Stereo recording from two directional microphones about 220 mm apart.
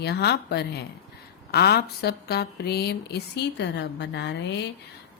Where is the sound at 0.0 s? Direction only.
50° left (ahead or behind).